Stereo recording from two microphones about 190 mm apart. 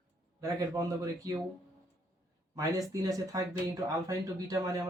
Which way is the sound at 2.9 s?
20° right (ahead or behind).